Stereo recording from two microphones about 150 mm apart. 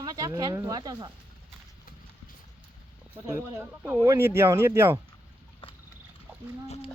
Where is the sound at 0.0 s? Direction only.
25° right (ahead or behind).